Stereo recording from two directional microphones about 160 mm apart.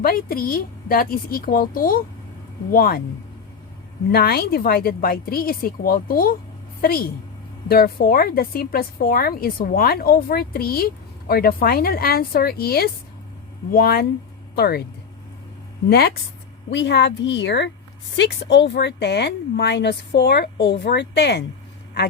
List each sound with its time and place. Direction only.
0.0 s speech: 65° left (ahead or behind)
4.1 s speech: 75° left (ahead or behind)
14.5 s speech: 80° left
15.9 s speech: 80° left
16.6 s speech: 90° left